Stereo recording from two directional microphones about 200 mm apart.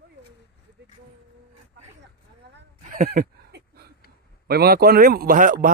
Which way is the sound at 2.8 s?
40° right (ahead or behind).